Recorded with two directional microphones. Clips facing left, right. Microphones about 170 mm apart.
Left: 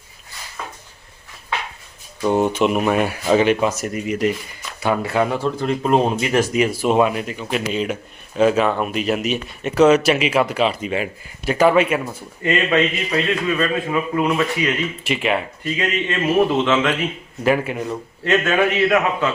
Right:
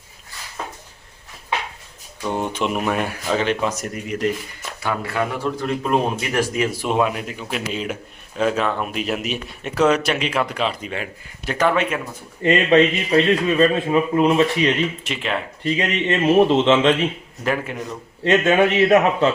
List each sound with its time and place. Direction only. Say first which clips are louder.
2.3 s speech: left 6 dB; 5° left (ahead or behind)
4.8 s speech: left 4 dB; 20° left (ahead or behind)
6.8 s speech: left 4 dB; centre (ahead or behind)
12.4 s a man's voice: right 3 dB; 30° right (ahead or behind)
15.0 s speech: left 5 dB; 10° left (ahead or behind)
15.6 s a man's voice: right 1 dB; 25° right (ahead or behind)
17.4 s speech: left 5 dB; 5° left (ahead or behind)
18.3 s a man's voice: right 2 dB; 25° right (ahead or behind)